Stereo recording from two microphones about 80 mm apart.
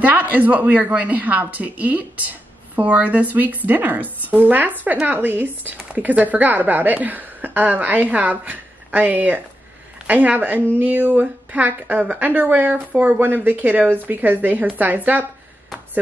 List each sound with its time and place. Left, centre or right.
0.0 s a woman's voice: right